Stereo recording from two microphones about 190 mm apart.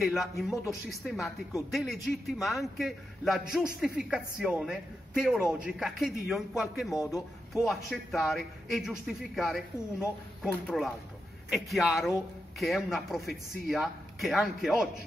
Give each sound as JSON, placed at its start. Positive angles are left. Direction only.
{"t": 0.0, "sound": "a man's voice", "side_deg": 0}
{"t": 7.0, "sound": "speech", "side_deg": 15}
{"t": 7.6, "sound": "a man's voice", "side_deg": 0}